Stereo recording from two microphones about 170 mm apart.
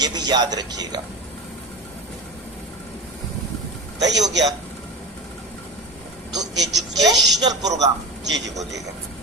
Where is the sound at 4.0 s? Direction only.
90° right.